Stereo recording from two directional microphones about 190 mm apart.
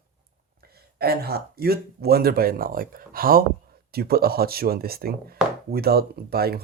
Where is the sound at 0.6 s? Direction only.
55° right (ahead or behind).